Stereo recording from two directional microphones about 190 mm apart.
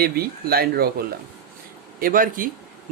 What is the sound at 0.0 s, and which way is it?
Speech, 55° right (ahead or behind).